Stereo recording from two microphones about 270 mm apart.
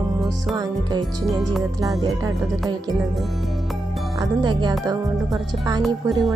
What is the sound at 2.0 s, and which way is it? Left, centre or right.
Music, centre.